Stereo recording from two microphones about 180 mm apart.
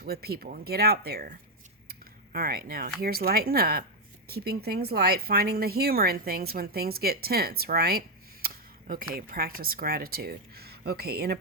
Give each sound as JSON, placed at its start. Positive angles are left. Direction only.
{"t": 0.0, "sound": "speech", "side_deg": -60}
{"t": 1.9, "sound": "a sound", "side_deg": -55}
{"t": 3.0, "sound": "speech", "side_deg": -55}